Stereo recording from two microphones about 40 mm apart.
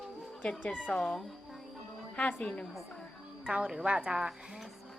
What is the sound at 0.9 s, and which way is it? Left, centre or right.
Speech, left.